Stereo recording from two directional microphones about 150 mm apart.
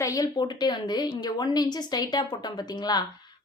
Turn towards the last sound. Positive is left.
turn(degrees=25)  # may be behind; listen again after turning